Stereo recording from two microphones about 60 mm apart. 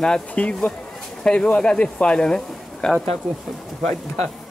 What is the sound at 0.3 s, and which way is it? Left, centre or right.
Speech, centre.